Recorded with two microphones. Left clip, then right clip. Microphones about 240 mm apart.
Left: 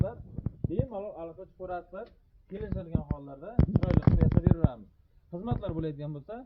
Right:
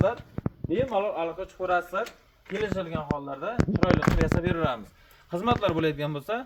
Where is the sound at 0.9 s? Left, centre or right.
Centre.